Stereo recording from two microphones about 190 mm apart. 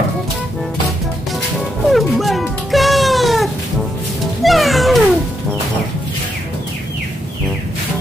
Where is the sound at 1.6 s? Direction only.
Centre (ahead or behind).